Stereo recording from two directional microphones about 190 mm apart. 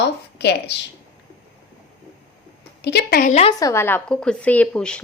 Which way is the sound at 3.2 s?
35° left (ahead or behind).